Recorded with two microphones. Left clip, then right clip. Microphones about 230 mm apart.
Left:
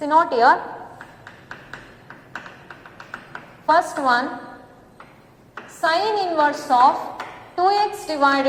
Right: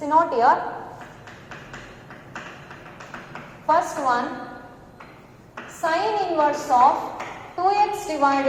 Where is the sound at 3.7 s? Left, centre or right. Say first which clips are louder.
Left 3 dB; left.